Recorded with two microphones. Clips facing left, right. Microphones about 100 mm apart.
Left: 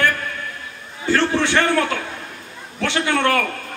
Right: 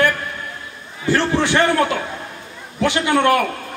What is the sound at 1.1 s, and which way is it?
A man's voice, 15° right (ahead or behind).